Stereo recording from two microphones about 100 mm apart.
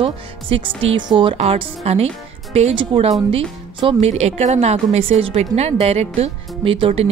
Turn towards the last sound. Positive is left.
turn(degrees=-75)  # may be behind; listen again after turning